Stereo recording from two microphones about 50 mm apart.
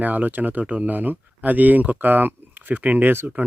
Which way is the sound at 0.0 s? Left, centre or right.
Right.